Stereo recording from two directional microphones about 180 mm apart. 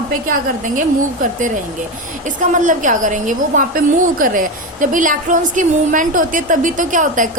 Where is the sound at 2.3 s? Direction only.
45° right (ahead or behind).